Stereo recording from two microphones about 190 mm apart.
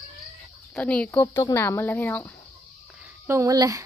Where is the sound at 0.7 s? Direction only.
5° left (ahead or behind).